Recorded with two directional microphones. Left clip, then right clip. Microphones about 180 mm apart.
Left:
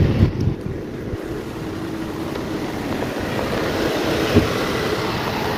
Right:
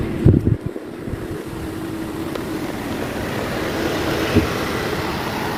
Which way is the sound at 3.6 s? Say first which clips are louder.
Even; 15° left (ahead or behind).